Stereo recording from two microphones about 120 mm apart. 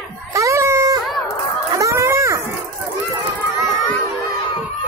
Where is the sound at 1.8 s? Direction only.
25° right (ahead or behind).